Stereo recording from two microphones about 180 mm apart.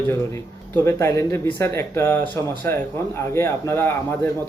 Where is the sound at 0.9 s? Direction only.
15° left (ahead or behind).